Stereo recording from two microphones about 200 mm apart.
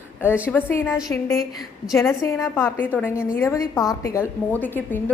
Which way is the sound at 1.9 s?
15° left (ahead or behind).